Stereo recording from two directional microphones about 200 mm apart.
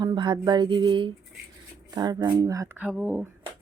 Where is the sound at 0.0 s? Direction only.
25° right (ahead or behind).